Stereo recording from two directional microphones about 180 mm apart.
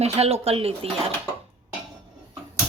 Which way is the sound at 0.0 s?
35° right (ahead or behind).